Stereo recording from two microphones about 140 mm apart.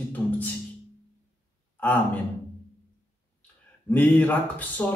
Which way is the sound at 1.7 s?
15° left (ahead or behind).